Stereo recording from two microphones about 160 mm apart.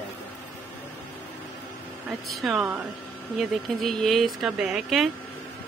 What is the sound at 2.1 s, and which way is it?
Speech, centre (ahead or behind).